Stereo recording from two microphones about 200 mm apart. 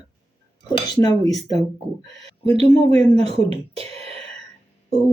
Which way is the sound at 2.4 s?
30° right (ahead or behind).